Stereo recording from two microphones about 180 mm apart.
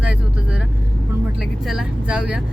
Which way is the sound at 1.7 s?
5° right (ahead or behind).